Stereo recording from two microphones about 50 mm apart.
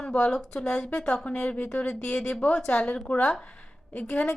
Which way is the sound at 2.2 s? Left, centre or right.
Centre.